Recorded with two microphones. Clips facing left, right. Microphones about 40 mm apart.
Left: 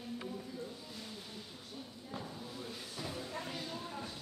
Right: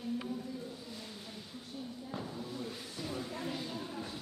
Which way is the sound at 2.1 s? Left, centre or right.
Centre.